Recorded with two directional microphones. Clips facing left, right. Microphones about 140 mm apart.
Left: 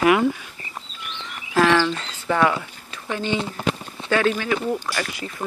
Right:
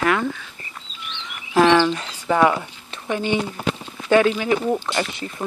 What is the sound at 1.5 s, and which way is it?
Speech, 20° right (ahead or behind).